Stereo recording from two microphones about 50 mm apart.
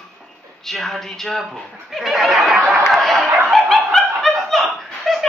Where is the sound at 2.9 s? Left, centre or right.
Centre.